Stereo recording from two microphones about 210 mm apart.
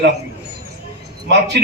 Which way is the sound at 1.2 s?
55° right (ahead or behind).